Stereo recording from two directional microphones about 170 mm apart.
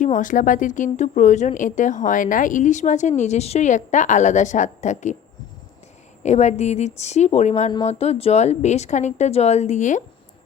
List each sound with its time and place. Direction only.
0.0 s speech: 50° left (ahead or behind)
6.2 s a woman's voice: 40° left (ahead or behind)